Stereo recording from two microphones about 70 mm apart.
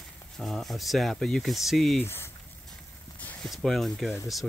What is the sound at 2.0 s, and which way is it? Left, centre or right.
Speech, left.